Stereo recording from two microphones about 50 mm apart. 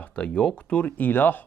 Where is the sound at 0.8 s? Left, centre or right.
Left.